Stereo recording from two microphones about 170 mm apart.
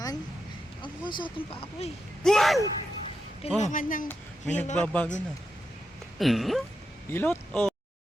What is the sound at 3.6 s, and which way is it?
Speech, 50° left (ahead or behind).